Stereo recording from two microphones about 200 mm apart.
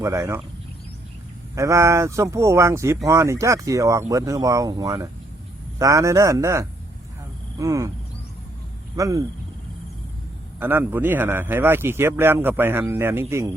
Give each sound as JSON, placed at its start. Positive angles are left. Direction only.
{"t": 0.0, "sound": "speech", "side_deg": -15}
{"t": 1.5, "sound": "speech", "side_deg": -15}
{"t": 9.0, "sound": "speech", "side_deg": -15}
{"t": 10.6, "sound": "speech", "side_deg": -10}